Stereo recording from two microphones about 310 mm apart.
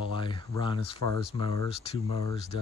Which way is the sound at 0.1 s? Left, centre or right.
Centre.